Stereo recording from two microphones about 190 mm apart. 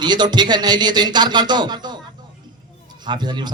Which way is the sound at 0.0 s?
20° right (ahead or behind).